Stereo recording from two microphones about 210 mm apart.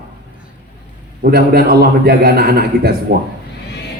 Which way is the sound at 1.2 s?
50° right (ahead or behind).